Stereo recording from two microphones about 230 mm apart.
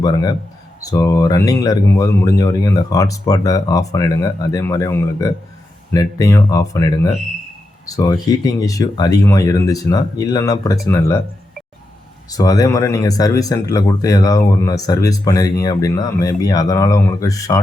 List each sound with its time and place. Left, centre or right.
0.0 s speech: centre
12.3 s speech: centre